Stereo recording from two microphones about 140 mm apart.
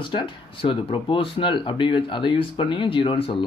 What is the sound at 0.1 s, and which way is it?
Speech, 35° left (ahead or behind).